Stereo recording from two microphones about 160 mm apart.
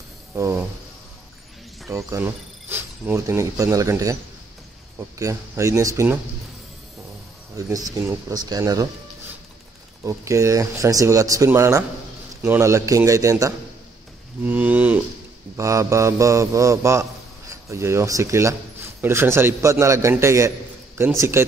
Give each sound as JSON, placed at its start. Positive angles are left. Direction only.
{"t": 0.4, "sound": "a man's voice", "side_deg": -15}
{"t": 1.9, "sound": "a man's voice", "side_deg": -20}
{"t": 7.5, "sound": "speech", "side_deg": -20}
{"t": 10.0, "sound": "speech", "side_deg": -20}
{"t": 14.4, "sound": "a man's voice", "side_deg": -10}